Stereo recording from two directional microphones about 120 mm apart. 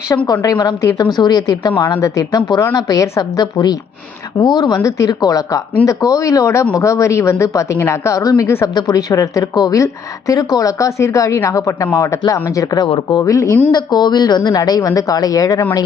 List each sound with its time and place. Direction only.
0.3 s speech: 35° left (ahead or behind)
13.7 s speech: 40° left (ahead or behind)